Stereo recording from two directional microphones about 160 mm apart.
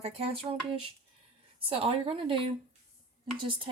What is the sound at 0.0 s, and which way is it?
Speech, 40° right (ahead or behind).